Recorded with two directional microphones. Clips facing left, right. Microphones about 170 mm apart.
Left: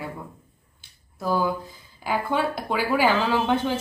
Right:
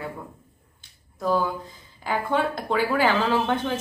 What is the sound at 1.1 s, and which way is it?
Speech, 10° left (ahead or behind).